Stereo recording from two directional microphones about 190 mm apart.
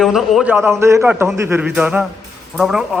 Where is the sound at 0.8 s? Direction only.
15° right (ahead or behind).